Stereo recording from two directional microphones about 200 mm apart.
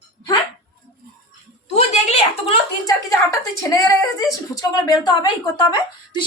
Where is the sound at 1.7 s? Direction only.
35° left (ahead or behind).